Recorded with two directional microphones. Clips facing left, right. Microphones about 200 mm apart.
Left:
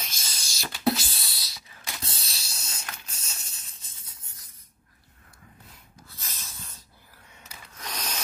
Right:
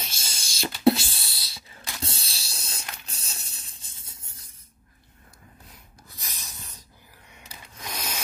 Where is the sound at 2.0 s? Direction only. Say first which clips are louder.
Right 5 dB; 30° right (ahead or behind).